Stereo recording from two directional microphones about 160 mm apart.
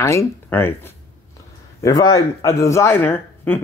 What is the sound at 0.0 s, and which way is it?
A man's voice, 15° left (ahead or behind).